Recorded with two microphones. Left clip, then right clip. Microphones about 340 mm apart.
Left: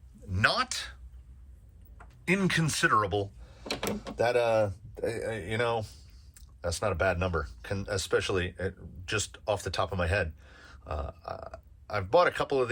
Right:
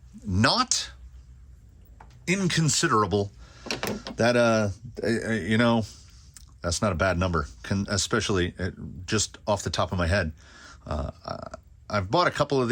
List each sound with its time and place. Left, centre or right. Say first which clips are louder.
0.3 s speech: right 4 dB; centre
2.2 s speech: right 2 dB; centre